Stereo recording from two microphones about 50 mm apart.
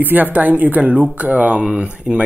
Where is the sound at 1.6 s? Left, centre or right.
Centre.